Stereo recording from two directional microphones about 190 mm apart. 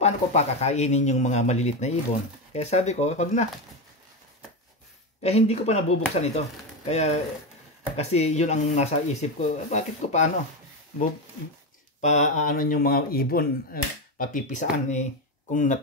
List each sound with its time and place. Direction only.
0.0 s speech: 35° left (ahead or behind)
5.2 s speech: 35° left (ahead or behind)
12.0 s speech: 40° left (ahead or behind)